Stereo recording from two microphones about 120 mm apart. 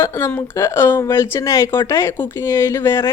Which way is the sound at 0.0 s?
25° left (ahead or behind).